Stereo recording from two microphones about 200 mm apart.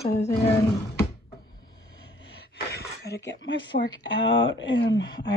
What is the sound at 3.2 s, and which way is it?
Speech, 60° left (ahead or behind).